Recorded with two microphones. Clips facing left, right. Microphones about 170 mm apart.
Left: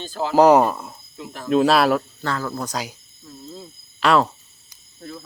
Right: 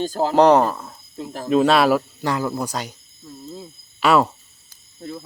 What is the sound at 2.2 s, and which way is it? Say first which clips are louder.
Speech: right 3 dB; 15° right (ahead or behind).